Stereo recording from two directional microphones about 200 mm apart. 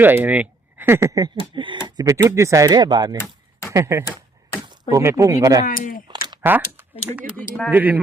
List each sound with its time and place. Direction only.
0.0 s speech: 10° right (ahead or behind)
5.6 s speech: 45° left (ahead or behind)
6.4 s speech: 10° right (ahead or behind)